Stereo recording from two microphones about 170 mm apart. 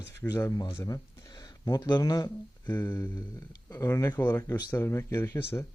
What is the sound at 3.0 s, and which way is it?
Speech, 10° left (ahead or behind).